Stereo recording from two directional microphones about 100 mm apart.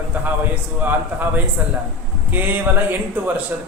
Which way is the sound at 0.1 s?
15° right (ahead or behind).